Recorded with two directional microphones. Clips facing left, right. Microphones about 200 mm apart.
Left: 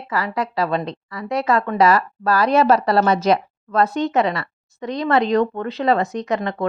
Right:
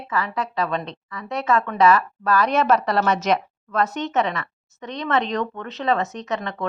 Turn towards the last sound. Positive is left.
turn(degrees=35)  # may be behind; listen again after turning